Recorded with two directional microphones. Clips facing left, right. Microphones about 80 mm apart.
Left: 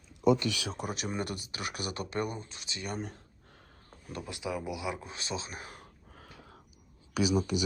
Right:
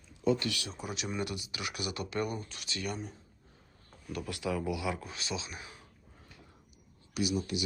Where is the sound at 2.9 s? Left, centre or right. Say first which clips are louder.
Left 3 dB; left.